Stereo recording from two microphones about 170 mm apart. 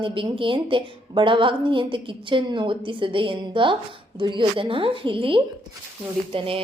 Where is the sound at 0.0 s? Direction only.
30° right (ahead or behind).